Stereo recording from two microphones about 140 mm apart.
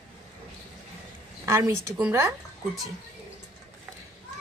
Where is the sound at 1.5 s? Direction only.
20° right (ahead or behind).